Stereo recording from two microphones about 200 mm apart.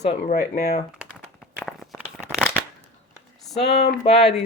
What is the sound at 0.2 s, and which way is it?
Speech, 50° left (ahead or behind).